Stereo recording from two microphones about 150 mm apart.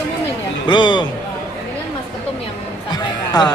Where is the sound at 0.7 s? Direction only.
30° left (ahead or behind).